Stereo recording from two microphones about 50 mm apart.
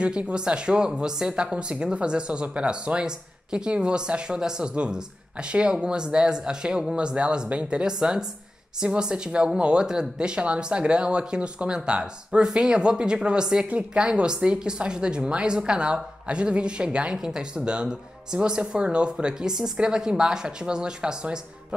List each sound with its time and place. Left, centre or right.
0.0 s speech: centre